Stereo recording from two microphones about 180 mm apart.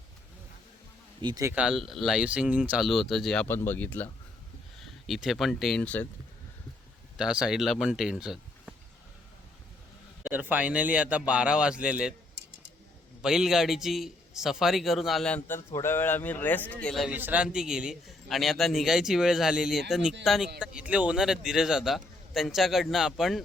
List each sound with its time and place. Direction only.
1.2 s speech: 20° right (ahead or behind)
1.5 s speech: centre (ahead or behind)
7.2 s speech: 5° right (ahead or behind)
10.3 s speech: 10° right (ahead or behind)
13.2 s speech: 5° right (ahead or behind)
15.4 s a man's voice: 15° left (ahead or behind); by 23.4 s 5° right (ahead or behind)